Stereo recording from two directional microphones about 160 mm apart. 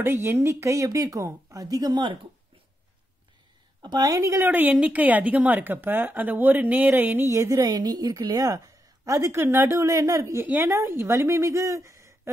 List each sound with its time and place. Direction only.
0.0 s speech: 15° right (ahead or behind)
3.8 s a woman's voice: 25° right (ahead or behind)